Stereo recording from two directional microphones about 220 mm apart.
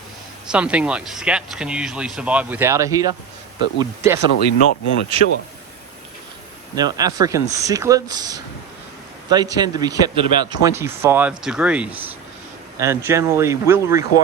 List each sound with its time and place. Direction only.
0.5 s speech: 5° right (ahead or behind)
4.3 s speech: 45° left (ahead or behind)
6.7 s speech: 15° right (ahead or behind)